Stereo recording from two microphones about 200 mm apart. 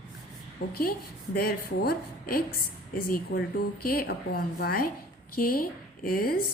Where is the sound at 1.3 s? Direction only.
50° left (ahead or behind).